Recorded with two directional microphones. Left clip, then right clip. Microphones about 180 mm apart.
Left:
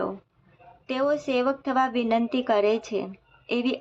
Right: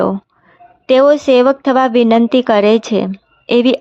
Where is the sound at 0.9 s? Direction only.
55° right (ahead or behind).